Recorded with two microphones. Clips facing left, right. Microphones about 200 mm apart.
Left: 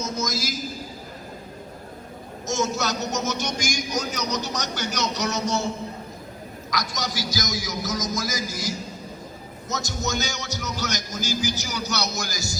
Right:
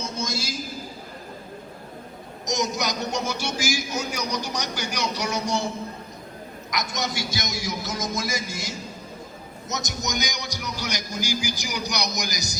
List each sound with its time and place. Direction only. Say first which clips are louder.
0.0 s a sound: left 2 dB; 30° right (ahead or behind)
2.5 s a man's voice: left 1 dB; 15° right (ahead or behind)
6.7 s music: right 1 dB; 25° right (ahead or behind)
9.6 s a man's voice: left 2 dB; 20° right (ahead or behind)